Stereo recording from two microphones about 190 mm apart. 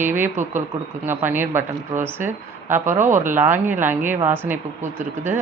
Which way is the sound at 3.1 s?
40° right (ahead or behind).